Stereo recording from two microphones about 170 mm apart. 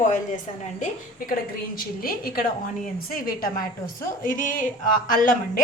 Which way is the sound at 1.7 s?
60° left (ahead or behind).